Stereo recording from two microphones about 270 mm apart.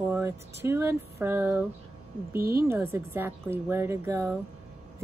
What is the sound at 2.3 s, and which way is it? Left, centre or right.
Speech, right.